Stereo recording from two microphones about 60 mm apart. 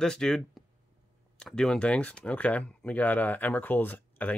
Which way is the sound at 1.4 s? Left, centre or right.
Centre.